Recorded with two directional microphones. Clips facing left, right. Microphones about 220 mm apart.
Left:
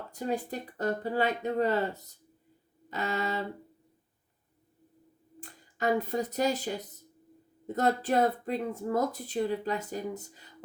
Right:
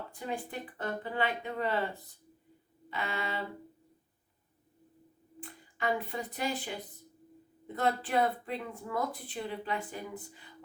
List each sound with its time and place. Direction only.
0.1 s speech: 40° left (ahead or behind)
5.4 s speech: 40° left (ahead or behind)